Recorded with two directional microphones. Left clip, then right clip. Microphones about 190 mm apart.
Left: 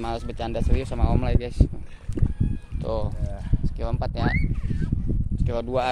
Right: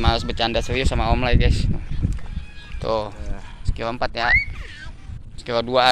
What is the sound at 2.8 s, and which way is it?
Speech, centre (ahead or behind).